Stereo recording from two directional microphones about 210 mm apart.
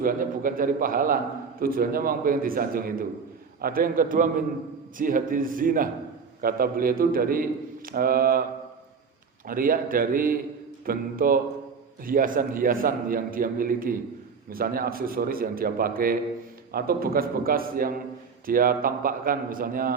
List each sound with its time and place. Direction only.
0.0 s a man's voice: 40° right (ahead or behind)
9.5 s a man's voice: 40° right (ahead or behind)